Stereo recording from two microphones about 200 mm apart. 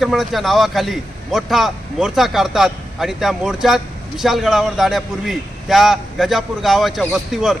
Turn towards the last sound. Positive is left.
turn(degrees=0)  # may be behind; listen again after turning